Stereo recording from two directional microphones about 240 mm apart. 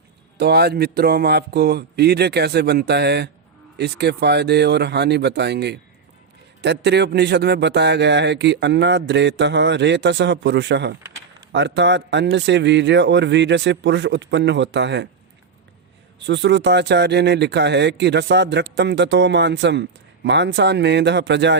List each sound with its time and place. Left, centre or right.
0.3 s speech: right
16.2 s speech: right